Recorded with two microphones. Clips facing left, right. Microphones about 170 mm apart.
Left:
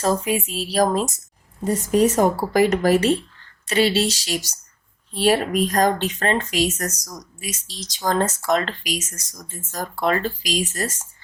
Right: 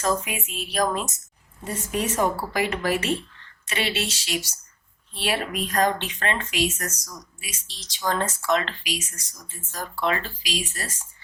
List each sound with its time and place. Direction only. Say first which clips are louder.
0.0 s speech: left 5 dB; 35° left (ahead or behind)